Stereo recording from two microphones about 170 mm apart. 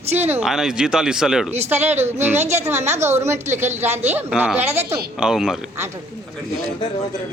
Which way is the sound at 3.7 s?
40° right (ahead or behind).